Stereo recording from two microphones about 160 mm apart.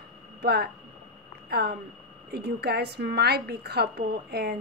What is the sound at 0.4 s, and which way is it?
A woman's voice, 90° right.